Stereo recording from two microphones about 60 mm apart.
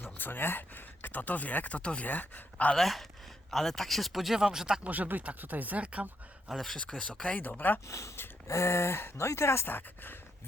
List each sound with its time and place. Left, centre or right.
0.0 s speech: left
2.7 s speech: centre
4.8 s speech: right
6.5 s speech: centre
7.3 s speech: left
7.9 s speech: left